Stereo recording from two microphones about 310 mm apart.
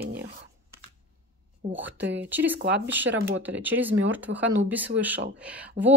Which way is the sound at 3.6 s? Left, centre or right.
Centre.